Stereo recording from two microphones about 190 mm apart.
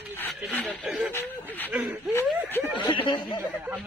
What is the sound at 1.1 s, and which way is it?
Speech, 10° left (ahead or behind).